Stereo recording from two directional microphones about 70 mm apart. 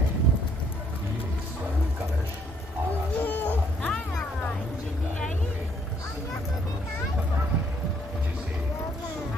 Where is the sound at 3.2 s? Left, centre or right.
Left.